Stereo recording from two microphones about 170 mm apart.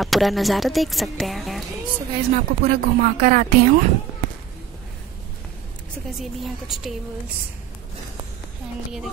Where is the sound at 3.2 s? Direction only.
55° right (ahead or behind).